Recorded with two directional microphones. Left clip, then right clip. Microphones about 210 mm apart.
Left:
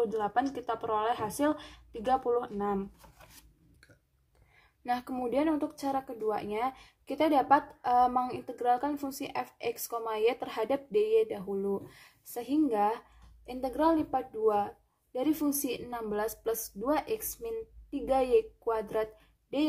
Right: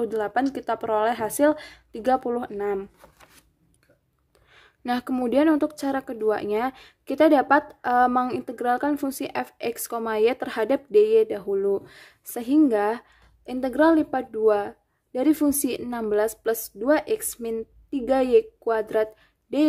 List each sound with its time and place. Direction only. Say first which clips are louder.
0.0 s speech: right 5 dB; 45° right (ahead or behind)
4.6 s speech: right 5 dB; 50° right (ahead or behind)